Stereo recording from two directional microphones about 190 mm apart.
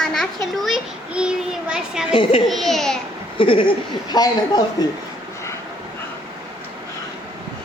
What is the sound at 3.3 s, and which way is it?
A woman's voice, 25° left (ahead or behind).